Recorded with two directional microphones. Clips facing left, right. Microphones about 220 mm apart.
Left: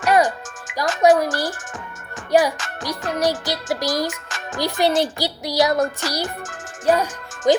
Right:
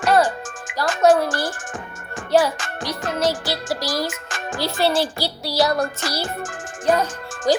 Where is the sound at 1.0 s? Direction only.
10° left (ahead or behind).